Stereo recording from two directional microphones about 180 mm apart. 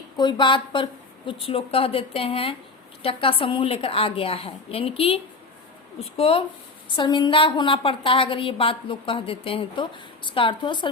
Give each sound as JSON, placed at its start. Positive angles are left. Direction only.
{"t": 0.2, "sound": "a woman's voice", "side_deg": 25}